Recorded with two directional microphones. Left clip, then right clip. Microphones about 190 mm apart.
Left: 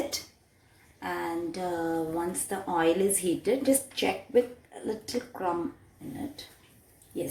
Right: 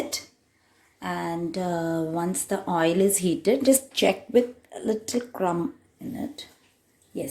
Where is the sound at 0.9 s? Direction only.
65° right (ahead or behind).